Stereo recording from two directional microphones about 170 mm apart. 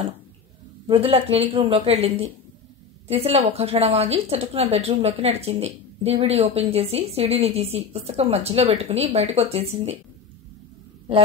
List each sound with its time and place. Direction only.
0.8 s a woman's voice: 35° right (ahead or behind)